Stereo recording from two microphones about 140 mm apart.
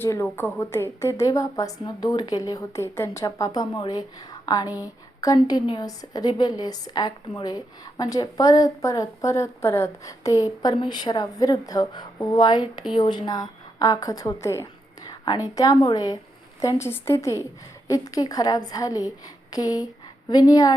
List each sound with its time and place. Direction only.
0.0 s a woman's voice: 20° left (ahead or behind)